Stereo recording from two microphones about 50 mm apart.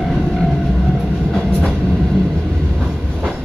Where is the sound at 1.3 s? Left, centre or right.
Centre.